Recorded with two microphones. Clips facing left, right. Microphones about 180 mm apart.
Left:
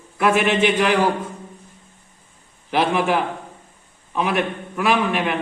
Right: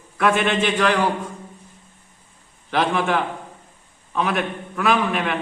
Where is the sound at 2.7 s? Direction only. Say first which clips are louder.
Left 2 dB; 5° left (ahead or behind).